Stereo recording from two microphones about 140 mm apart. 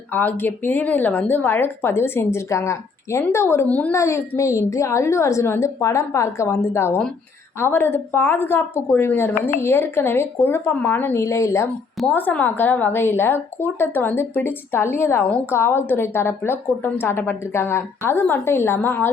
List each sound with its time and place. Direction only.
0.1 s a woman's voice: 15° left (ahead or behind)
4.0 s a woman's voice: 20° left (ahead or behind)
11.9 s a woman's voice: 10° left (ahead or behind)